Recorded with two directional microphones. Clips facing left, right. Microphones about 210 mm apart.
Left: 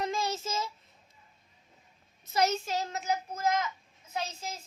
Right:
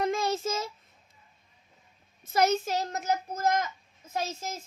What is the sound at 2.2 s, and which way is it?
A woman's voice, 55° right (ahead or behind).